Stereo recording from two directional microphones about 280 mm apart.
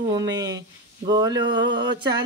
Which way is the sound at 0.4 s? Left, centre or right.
Centre.